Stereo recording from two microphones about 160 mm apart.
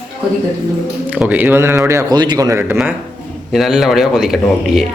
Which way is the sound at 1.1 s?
10° right (ahead or behind).